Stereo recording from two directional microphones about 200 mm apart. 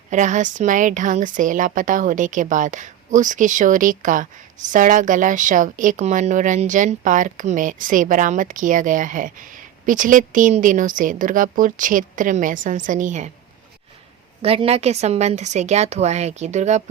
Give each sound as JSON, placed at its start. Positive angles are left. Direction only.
{"t": 0.1, "sound": "a woman's voice", "side_deg": -40}
{"t": 14.4, "sound": "a woman's voice", "side_deg": -30}